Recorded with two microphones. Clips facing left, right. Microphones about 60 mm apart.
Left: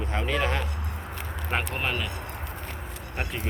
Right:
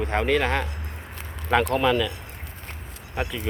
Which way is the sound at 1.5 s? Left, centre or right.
Right.